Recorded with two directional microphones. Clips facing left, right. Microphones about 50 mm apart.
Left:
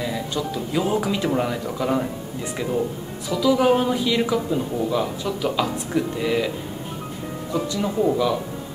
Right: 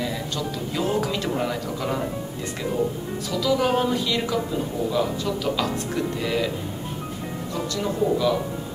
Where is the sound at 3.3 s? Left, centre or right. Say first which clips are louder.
Left 4 dB; centre.